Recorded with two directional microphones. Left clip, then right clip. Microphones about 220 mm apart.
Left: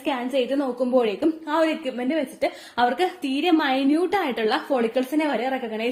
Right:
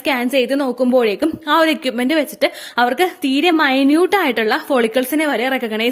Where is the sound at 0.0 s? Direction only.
45° right (ahead or behind).